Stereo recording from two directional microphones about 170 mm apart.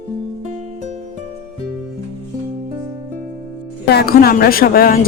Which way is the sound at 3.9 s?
65° left (ahead or behind).